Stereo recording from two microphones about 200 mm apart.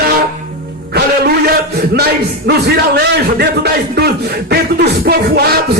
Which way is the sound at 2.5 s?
55° right (ahead or behind).